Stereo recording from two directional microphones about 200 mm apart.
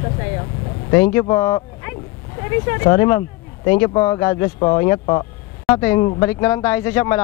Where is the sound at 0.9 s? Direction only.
15° left (ahead or behind).